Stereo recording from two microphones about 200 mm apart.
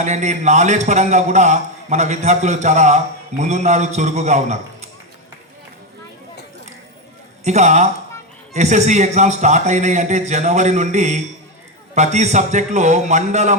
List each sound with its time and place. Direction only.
0.0 s a man's voice: 35° right (ahead or behind)
7.4 s a man's voice: 35° right (ahead or behind)